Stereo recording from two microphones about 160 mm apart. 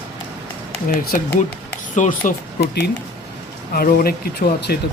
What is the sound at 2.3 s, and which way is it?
Speech, 90° left.